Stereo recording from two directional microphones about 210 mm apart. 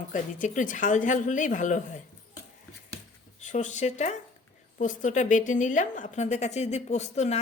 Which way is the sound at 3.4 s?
35° left (ahead or behind).